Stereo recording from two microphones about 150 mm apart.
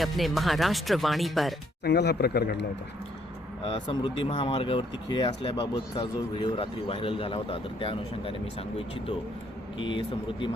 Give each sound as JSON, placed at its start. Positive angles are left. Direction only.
{"t": 0.0, "sound": "speech", "side_deg": 0}
{"t": 1.8, "sound": "speech", "side_deg": 90}
{"t": 3.6, "sound": "speech", "side_deg": 35}
{"t": 9.7, "sound": "speech", "side_deg": 35}